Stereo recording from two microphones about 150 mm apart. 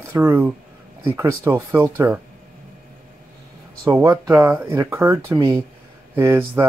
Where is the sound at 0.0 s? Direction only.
15° right (ahead or behind).